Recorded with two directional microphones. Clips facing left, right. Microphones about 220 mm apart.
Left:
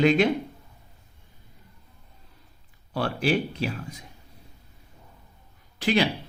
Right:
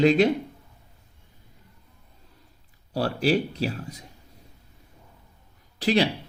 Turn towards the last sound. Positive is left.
turn(degrees=-35)  # may be behind; listen again after turning